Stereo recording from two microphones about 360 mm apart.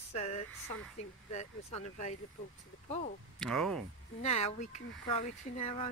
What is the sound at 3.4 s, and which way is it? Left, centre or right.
Speech, centre.